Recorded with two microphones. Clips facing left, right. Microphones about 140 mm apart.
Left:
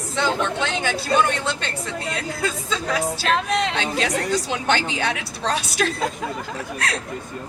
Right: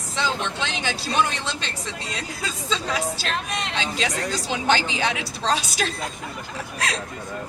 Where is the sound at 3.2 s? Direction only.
75° left (ahead or behind).